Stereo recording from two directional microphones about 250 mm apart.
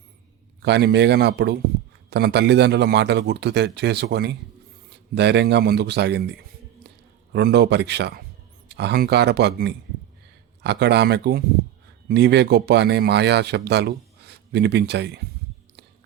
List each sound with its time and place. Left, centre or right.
0.6 s a man's voice: right
7.3 s a man's voice: right